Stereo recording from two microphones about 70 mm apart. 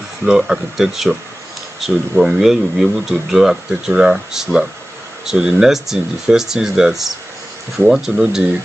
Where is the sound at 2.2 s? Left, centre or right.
Centre.